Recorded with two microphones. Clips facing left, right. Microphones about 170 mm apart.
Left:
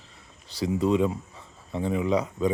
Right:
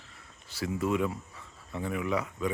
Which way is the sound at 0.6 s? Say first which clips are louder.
Left 6 dB; 20° left (ahead or behind).